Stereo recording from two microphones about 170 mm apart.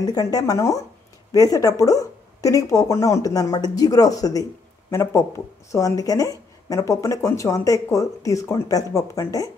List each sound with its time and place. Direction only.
0.0 s speech: 20° left (ahead or behind)